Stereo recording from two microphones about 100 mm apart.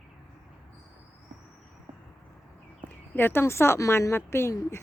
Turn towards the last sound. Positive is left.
turn(degrees=25)  # may be behind; listen again after turning